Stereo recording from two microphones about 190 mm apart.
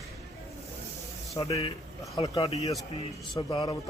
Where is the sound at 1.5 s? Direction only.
35° left (ahead or behind).